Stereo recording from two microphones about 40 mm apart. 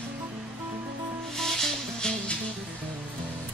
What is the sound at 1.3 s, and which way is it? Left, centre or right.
Music, centre.